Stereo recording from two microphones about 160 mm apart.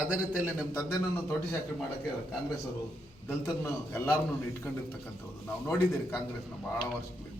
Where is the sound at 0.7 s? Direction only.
15° left (ahead or behind).